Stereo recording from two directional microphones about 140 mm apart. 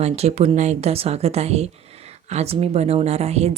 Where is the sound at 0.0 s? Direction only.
50° right (ahead or behind).